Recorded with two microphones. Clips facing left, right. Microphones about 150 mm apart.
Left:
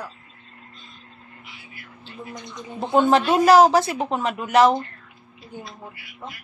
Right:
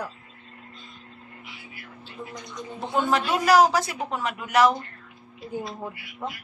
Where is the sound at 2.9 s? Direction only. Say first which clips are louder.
Left 7 dB; 25° left (ahead or behind).